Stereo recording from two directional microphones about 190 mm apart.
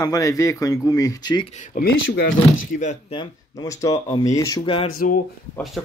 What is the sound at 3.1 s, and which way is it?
Speech, 20° left (ahead or behind).